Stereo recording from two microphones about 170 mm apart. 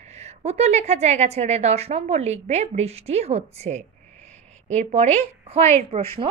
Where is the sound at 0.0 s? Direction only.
40° right (ahead or behind).